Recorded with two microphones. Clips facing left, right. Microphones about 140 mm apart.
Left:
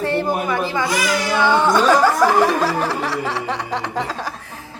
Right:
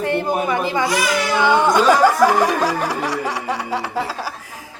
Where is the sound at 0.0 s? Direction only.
15° right (ahead or behind).